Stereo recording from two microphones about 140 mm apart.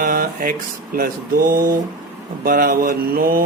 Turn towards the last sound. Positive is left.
turn(degrees=-90)